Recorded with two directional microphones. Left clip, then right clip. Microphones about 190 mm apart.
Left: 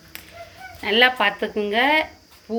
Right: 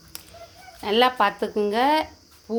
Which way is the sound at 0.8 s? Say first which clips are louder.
Left 2 dB; 20° right (ahead or behind).